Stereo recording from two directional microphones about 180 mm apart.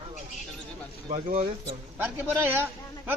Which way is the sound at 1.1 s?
45° right (ahead or behind).